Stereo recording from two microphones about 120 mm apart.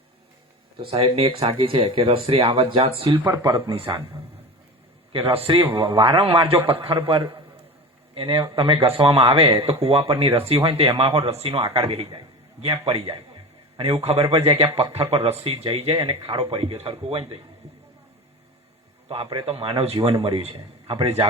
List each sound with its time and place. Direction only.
0.8 s speech: 50° right (ahead or behind)
3.2 s speech: 35° right (ahead or behind)
5.1 s a man's voice: 55° right (ahead or behind)
12.8 s speech: 50° right (ahead or behind)
19.0 s a man's voice: 50° right (ahead or behind)